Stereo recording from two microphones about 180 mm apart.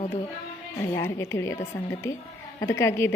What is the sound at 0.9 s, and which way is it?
A woman's voice, 15° left (ahead or behind).